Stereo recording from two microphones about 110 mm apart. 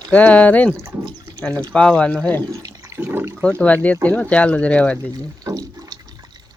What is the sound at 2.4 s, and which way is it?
Water, 35° right (ahead or behind).